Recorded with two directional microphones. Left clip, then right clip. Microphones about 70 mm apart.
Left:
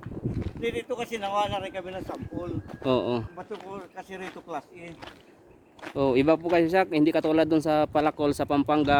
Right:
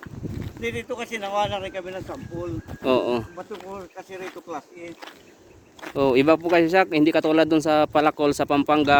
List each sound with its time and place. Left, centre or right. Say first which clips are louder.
0.6 s speech: right 1 dB; centre; by 2.0 s left
2.8 s speech: right 4 dB; right
3.3 s speech: right 3 dB; left
5.9 s speech: right 4 dB; centre